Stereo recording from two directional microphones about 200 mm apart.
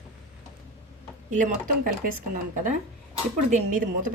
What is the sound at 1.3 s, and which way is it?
Speech, 40° right (ahead or behind).